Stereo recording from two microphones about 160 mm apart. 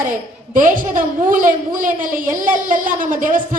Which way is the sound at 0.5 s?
55° right (ahead or behind).